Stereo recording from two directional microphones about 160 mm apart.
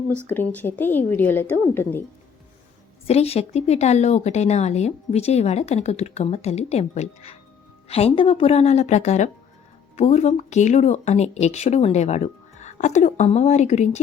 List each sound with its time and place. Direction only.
0.3 s a woman's voice: 10° left (ahead or behind)
3.1 s a woman's voice: 40° left (ahead or behind)